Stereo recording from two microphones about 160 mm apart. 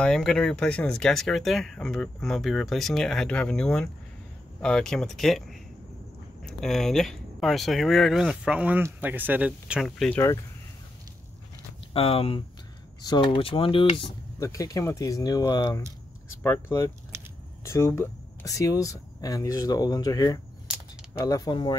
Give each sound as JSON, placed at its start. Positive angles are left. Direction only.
{"t": 0.0, "sound": "speech", "side_deg": 5}
{"t": 11.9, "sound": "speech", "side_deg": 35}
{"t": 14.4, "sound": "speech", "side_deg": 20}
{"t": 17.1, "sound": "a sound", "side_deg": -15}
{"t": 17.6, "sound": "speech", "side_deg": 15}